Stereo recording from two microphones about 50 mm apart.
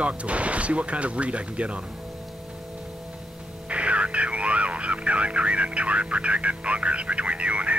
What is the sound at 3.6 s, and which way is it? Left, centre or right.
Speech, right.